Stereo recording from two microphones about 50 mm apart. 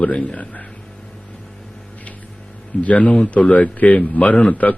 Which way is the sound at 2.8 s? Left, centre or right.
Left.